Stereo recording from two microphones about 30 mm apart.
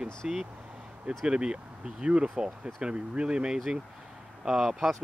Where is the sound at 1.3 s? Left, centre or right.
Right.